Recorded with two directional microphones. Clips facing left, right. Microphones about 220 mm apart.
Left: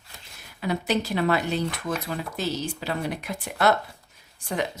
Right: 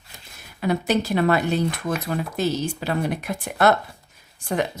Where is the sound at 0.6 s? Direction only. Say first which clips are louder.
Right 4 dB; 50° right (ahead or behind).